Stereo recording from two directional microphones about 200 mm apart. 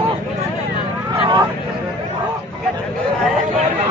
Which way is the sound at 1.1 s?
25° right (ahead or behind).